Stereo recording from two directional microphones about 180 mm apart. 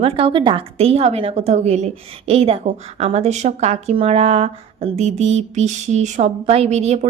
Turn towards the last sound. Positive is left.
turn(degrees=-35)  # may be behind; listen again after turning